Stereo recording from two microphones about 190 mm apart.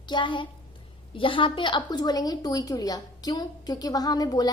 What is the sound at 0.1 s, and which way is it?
A woman's voice, 25° left (ahead or behind).